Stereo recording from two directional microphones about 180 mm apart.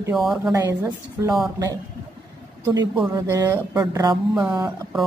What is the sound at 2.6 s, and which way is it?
A man's voice, 20° right (ahead or behind).